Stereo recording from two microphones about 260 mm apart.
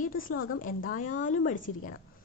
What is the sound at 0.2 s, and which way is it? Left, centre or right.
Speech, left.